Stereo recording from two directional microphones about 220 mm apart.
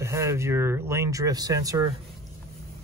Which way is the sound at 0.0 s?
10° right (ahead or behind).